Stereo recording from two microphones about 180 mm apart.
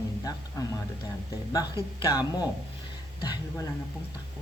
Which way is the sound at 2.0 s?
20° left (ahead or behind).